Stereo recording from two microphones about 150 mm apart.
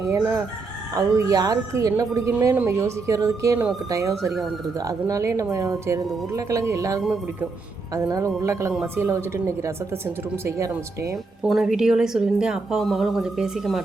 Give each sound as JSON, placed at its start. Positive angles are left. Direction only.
{"t": 0.0, "sound": "speech", "side_deg": -20}
{"t": 11.4, "sound": "a woman's voice", "side_deg": 0}